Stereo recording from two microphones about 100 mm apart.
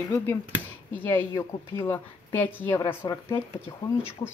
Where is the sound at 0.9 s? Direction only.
20° left (ahead or behind).